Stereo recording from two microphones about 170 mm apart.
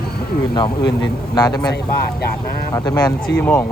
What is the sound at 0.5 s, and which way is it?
Speech, 25° left (ahead or behind).